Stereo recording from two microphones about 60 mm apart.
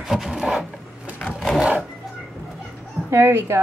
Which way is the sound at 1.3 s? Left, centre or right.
Centre.